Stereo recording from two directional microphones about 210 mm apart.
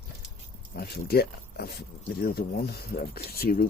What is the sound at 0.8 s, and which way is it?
Speech, 50° left (ahead or behind).